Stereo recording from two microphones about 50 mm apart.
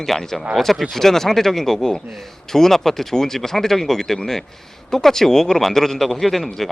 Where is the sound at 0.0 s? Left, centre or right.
Centre.